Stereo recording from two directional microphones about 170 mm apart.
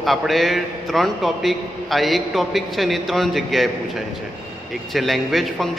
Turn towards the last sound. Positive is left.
turn(degrees=0)  # may be behind; listen again after turning